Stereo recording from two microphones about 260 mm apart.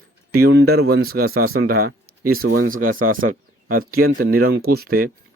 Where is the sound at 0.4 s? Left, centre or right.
Right.